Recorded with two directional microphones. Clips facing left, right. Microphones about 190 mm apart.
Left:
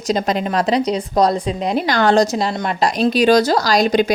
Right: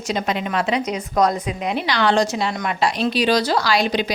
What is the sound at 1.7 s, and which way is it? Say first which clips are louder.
A woman's voice: left 4 dB; 45° left (ahead or behind).